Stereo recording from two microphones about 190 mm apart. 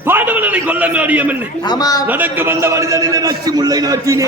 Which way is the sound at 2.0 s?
10° right (ahead or behind).